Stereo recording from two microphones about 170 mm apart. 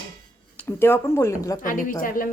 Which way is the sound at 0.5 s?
15° left (ahead or behind).